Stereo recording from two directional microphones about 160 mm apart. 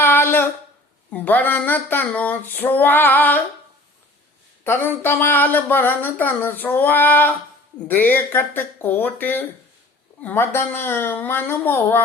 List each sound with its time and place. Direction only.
0.0 s a sound: 15° left (ahead or behind)
1.1 s speech: 10° left (ahead or behind)
4.6 s speech: 15° left (ahead or behind)